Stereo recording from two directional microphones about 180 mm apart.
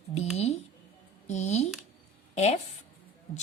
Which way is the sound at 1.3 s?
40° left (ahead or behind).